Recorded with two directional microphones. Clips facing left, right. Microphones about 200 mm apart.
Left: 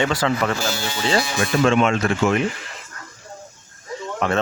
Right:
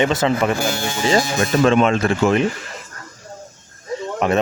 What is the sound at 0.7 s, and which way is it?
Speech, 50° right (ahead or behind).